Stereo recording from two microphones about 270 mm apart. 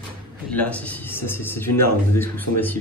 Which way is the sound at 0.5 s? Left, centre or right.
Centre.